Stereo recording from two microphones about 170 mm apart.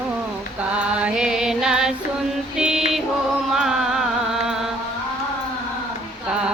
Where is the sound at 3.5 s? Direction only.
Centre (ahead or behind).